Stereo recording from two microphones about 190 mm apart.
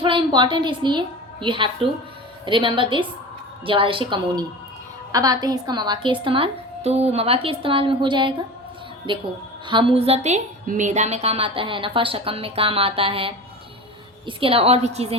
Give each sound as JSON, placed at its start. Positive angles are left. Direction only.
{"t": 0.0, "sound": "a woman's voice", "side_deg": -25}